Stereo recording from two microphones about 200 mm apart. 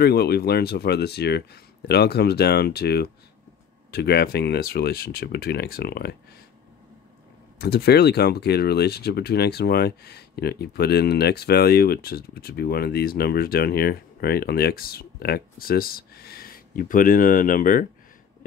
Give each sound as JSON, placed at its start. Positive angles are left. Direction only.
{"t": 0.0, "sound": "speech", "side_deg": 50}
{"t": 7.5, "sound": "speech", "side_deg": 55}